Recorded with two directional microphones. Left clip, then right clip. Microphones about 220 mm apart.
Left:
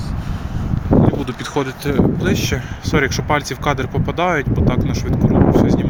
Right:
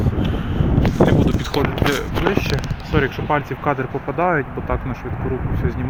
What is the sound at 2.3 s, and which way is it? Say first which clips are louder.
Speech: left 1 dB; 20° left (ahead or behind).